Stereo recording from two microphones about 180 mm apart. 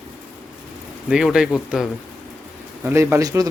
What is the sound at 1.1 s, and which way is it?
Speech, 5° right (ahead or behind).